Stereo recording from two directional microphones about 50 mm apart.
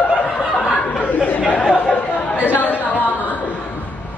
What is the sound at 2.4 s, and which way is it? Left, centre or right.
Chatter, left.